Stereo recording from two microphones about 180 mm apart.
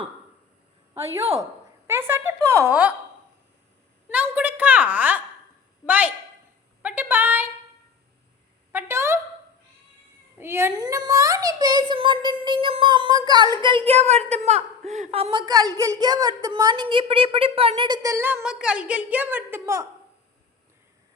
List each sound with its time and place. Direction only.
1.9 s a woman's voice: 10° right (ahead or behind)
4.1 s a woman's voice: 10° right (ahead or behind)
8.7 s fowl: 15° right (ahead or behind)
10.3 s speech: 15° right (ahead or behind)